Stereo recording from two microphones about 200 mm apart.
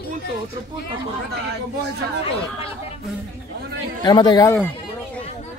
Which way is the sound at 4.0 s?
20° left (ahead or behind).